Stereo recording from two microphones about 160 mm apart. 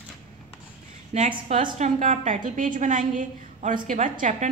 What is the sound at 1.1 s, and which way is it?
A woman's voice, 45° right (ahead or behind).